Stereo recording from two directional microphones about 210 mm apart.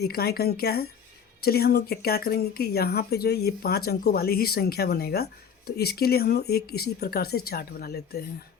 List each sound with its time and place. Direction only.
0.0 s speech: 50° left (ahead or behind)